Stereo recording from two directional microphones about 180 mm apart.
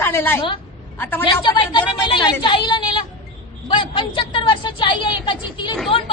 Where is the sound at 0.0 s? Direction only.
15° left (ahead or behind).